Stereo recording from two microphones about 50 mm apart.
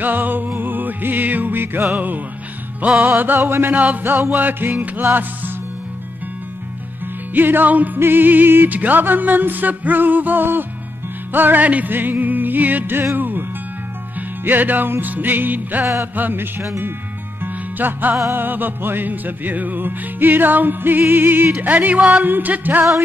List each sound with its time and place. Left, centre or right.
0.0 s music: right
3.2 s music: right
4.1 s music: right
4.4 s music: right
7.3 s music: right
15.8 s music: right
16.2 s music: right
17.7 s music: right